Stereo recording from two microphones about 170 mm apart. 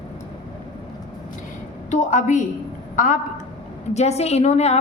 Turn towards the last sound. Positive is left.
turn(degrees=40)  # may be behind; listen again after turning